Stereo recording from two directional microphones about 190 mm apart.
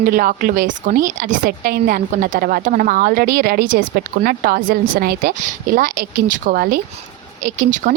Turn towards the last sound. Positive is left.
turn(degrees=-45)  # may be behind; listen again after turning